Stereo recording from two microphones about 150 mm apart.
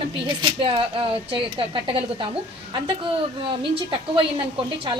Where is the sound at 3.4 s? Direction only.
35° right (ahead or behind).